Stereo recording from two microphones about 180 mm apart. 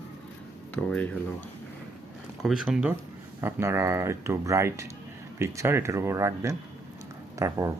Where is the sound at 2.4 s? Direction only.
5° right (ahead or behind).